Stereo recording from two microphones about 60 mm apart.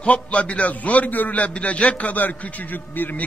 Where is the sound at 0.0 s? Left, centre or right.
Left.